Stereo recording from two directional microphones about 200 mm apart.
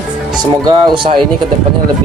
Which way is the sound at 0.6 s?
20° right (ahead or behind).